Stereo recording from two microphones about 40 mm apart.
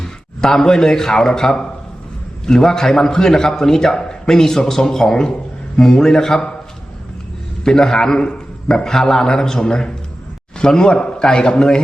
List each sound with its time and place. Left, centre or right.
0.0 s a man's voice: centre
7.6 s a man's voice: centre
8.7 s a man's voice: centre